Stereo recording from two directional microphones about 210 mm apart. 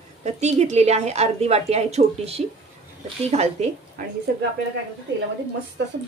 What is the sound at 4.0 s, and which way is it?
Speech, 45° right (ahead or behind).